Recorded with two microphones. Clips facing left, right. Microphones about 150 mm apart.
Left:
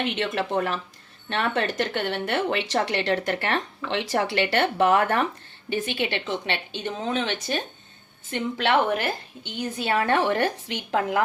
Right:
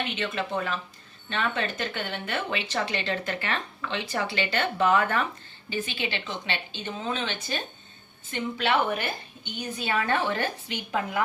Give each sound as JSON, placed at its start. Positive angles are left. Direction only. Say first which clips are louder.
{"t": 0.1, "sound": "speech", "louder": "left 4 dB", "side_deg": 65}
{"t": 9.4, "sound": "speech", "louder": "left 3 dB", "side_deg": 90}